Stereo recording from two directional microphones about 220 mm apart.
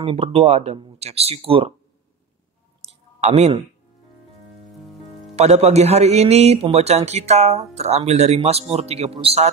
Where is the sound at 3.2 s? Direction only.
30° right (ahead or behind).